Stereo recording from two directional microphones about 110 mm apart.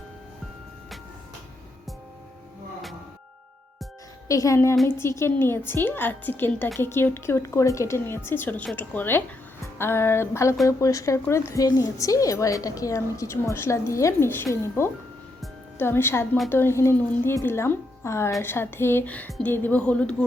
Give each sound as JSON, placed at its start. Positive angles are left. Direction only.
{"t": 4.3, "sound": "a woman's voice", "side_deg": 30}